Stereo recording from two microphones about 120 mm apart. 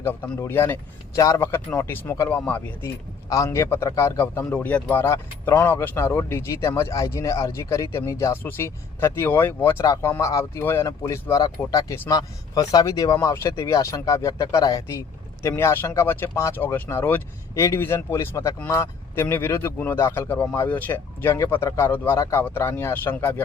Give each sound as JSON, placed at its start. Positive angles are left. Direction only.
{"t": 0.0, "sound": "speech", "side_deg": 20}
{"t": 3.2, "sound": "speech", "side_deg": 25}
{"t": 4.4, "sound": "speech", "side_deg": 10}
{"t": 4.9, "sound": "speech", "side_deg": 20}